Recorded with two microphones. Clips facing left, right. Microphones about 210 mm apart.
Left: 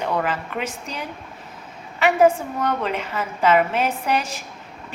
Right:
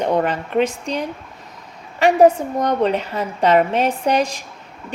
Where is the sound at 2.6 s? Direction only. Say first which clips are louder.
Right 6 dB; 35° right (ahead or behind).